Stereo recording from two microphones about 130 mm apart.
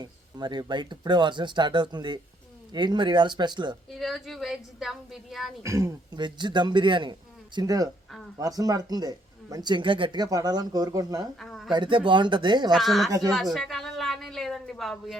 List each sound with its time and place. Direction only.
0.0 s speech: 35° right (ahead or behind)
3.8 s a woman's voice: centre (ahead or behind)
5.6 s speech: 25° right (ahead or behind)
6.1 s speech: 35° right (ahead or behind)
11.3 s a sound: centre (ahead or behind)
11.7 s speech: 40° right (ahead or behind)
12.7 s a woman's voice: centre (ahead or behind)
13.1 s speech: 25° right (ahead or behind)
13.3 s a woman's voice: centre (ahead or behind)